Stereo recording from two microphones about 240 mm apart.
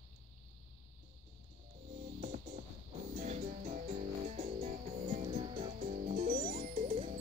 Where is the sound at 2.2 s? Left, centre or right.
Right.